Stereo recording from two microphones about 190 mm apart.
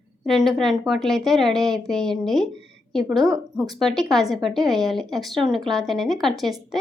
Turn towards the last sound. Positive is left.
turn(degrees=0)  # may be behind; listen again after turning